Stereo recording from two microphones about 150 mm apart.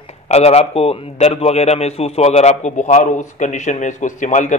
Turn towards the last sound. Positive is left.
turn(degrees=55)  # may be behind; listen again after turning